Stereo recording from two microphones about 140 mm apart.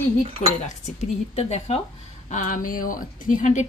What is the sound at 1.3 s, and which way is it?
Speech, 50° left (ahead or behind).